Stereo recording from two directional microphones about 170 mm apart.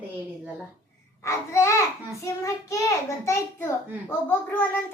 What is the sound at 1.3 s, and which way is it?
A child's voice, 15° left (ahead or behind).